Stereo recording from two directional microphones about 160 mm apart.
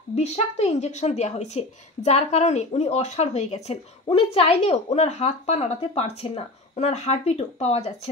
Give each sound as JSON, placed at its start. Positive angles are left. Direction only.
{"t": 0.1, "sound": "speech", "side_deg": 40}